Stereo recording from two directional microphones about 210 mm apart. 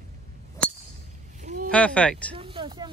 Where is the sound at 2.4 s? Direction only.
25° right (ahead or behind).